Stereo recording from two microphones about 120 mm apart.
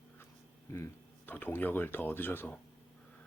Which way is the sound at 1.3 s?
15° left (ahead or behind).